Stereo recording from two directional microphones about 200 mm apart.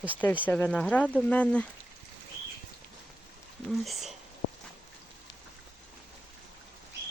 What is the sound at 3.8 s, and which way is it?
Speech, centre (ahead or behind).